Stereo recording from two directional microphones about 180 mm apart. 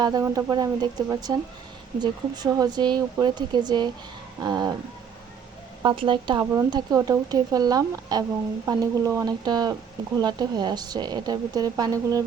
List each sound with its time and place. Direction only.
0.0 s speech: 20° right (ahead or behind)
5.8 s speech: 25° right (ahead or behind)